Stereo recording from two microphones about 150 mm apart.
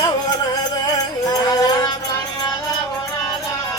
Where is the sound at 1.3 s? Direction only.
25° left (ahead or behind).